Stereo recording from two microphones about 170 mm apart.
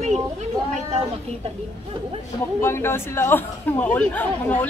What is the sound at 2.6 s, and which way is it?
Speech, 15° left (ahead or behind).